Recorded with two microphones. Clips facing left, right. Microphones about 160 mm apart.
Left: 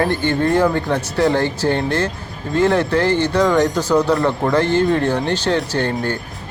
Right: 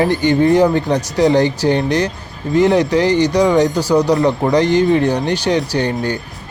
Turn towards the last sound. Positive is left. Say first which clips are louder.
# right 2 dB
turn(degrees=-15)  # may be behind; listen again after turning